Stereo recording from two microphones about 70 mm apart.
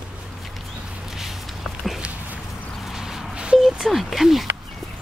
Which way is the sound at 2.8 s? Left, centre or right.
Centre.